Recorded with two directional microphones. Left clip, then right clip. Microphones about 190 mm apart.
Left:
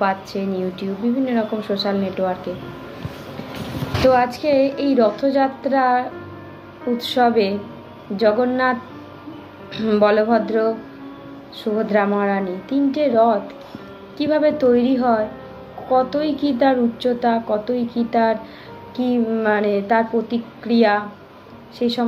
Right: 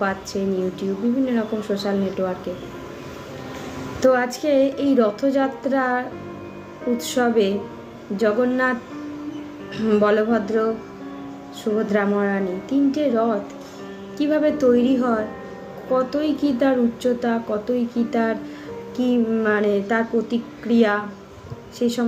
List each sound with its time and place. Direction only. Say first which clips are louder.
0.0 s a woman's voice: left 3 dB; 20° right (ahead or behind)
4.0 s a woman's voice: left 3 dB; 20° right (ahead or behind)
9.8 s a woman's voice: left 2 dB; 25° right (ahead or behind)
11.9 s a woman's voice: left 5 dB; 20° right (ahead or behind)